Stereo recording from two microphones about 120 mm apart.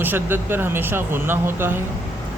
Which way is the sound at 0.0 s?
15° right (ahead or behind).